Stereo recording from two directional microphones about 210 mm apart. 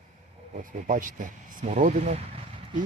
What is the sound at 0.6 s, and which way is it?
Speech, 40° right (ahead or behind).